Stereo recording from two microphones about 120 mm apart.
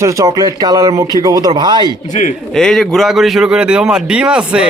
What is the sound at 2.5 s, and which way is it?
Speech, 5° left (ahead or behind).